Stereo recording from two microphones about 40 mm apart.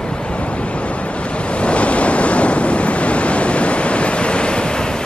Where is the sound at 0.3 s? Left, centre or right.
Left.